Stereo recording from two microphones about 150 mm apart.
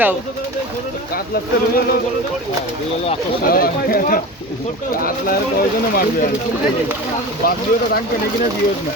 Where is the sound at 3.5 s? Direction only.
75° left (ahead or behind).